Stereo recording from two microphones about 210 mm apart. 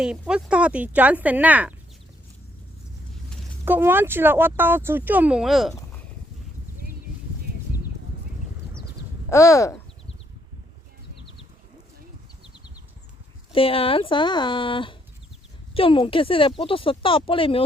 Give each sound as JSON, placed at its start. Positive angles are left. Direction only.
{"t": 0.0, "sound": "speech", "side_deg": -5}
{"t": 3.7, "sound": "speech", "side_deg": -10}
{"t": 9.3, "sound": "speech", "side_deg": 15}
{"t": 13.5, "sound": "speech", "side_deg": 25}